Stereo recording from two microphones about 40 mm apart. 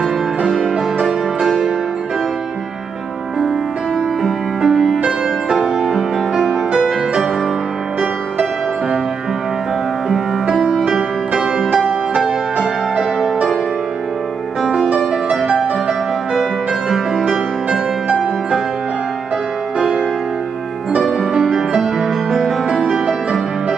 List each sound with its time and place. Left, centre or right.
0.4 s music: centre
4.6 s music: centre
10.4 s music: right
10.9 s music: centre
12.5 s music: right
14.6 s music: centre
15.5 s music: centre
17.6 s music: right
21.2 s music: centre